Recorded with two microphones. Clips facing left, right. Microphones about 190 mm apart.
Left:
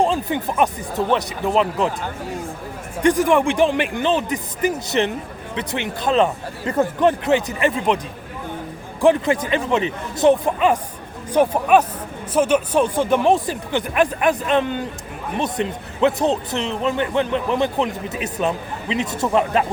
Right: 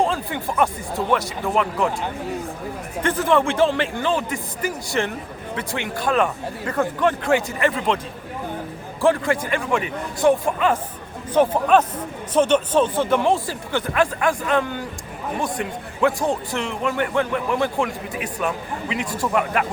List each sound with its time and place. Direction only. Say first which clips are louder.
0.0 s speech: left 3 dB; 15° left (ahead or behind)
3.0 s speech: left 3 dB; 15° left (ahead or behind)
9.0 s speech: left 3 dB; 20° left (ahead or behind)